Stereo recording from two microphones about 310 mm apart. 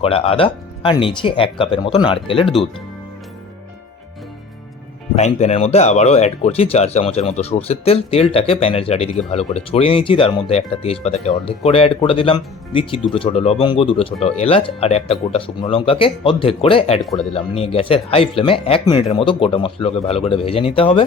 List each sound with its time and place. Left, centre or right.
0.0 s speech: centre
5.1 s speech: left